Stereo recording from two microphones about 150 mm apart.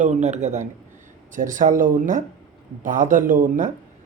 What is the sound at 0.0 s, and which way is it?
Speech, 50° right (ahead or behind).